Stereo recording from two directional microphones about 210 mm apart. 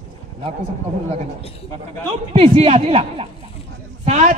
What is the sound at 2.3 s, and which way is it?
A man's voice, 30° right (ahead or behind).